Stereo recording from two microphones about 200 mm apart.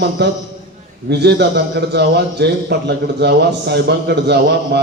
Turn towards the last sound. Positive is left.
turn(degrees=-55)  # may be behind; listen again after turning